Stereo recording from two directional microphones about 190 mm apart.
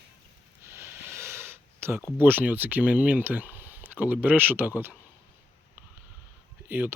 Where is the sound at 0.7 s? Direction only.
10° right (ahead or behind).